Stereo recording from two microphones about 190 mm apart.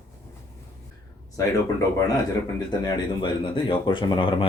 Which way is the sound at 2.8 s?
25° left (ahead or behind).